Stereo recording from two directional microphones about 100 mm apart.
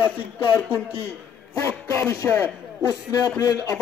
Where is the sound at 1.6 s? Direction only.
25° left (ahead or behind).